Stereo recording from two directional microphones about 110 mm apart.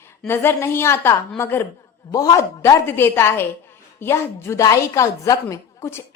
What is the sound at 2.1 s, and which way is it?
A woman's voice, 35° left (ahead or behind).